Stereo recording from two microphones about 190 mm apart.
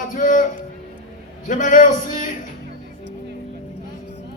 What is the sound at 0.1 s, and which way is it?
Speech, 45° left (ahead or behind).